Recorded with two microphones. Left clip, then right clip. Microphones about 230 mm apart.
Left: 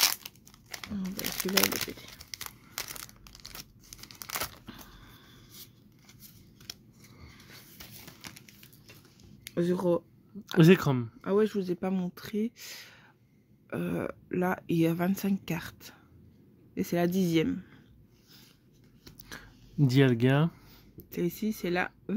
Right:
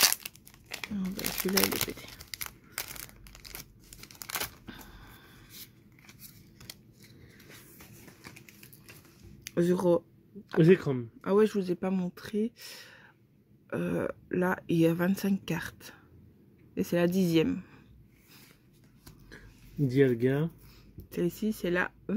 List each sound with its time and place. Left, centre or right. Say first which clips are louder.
0.0 s crumpling: right 1 dB; centre
3.5 s tearing: left 1 dB; centre
9.4 s speech: right 2 dB; centre
10.6 s speech: left 1 dB; left
11.1 s speech: right 3 dB; centre
19.9 s speech: even; left
21.1 s speech: right 1 dB; centre